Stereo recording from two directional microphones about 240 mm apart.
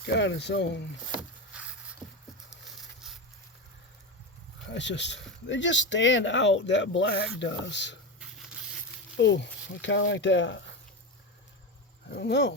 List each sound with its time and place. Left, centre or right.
0.0 s speech: left
2.0 s a sound: centre
2.5 s patter: centre
4.7 s speech: left
9.1 s speech: left
12.1 s speech: left